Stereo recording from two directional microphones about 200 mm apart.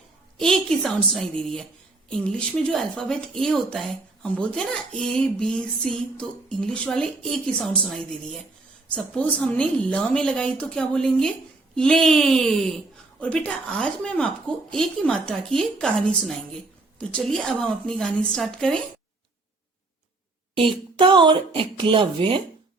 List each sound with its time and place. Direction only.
0.3 s a woman's voice: centre (ahead or behind)
20.6 s a woman's voice: 25° right (ahead or behind)